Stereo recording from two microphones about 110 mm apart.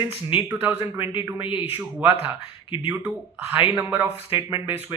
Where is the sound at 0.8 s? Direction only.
50° left (ahead or behind).